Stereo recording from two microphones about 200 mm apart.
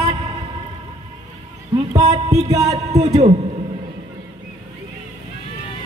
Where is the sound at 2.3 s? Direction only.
15° right (ahead or behind).